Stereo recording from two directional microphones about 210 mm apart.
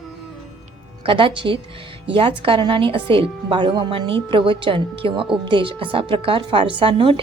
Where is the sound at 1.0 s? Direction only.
25° right (ahead or behind).